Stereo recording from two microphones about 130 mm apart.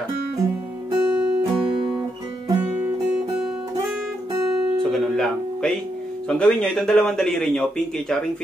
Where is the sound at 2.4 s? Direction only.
20° right (ahead or behind).